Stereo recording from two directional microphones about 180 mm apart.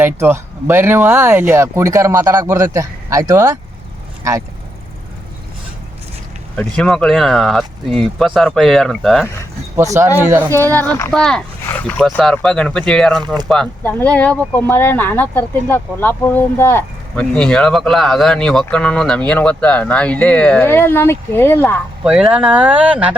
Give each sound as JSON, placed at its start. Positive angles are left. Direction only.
{"t": 0.0, "sound": "speech", "side_deg": -15}
{"t": 6.6, "sound": "speech", "side_deg": 5}
{"t": 9.7, "sound": "speech", "side_deg": -15}
{"t": 10.8, "sound": "speech", "side_deg": 10}
{"t": 13.1, "sound": "speech", "side_deg": -25}
{"t": 13.5, "sound": "speech", "side_deg": 5}
{"t": 22.0, "sound": "speech", "side_deg": -5}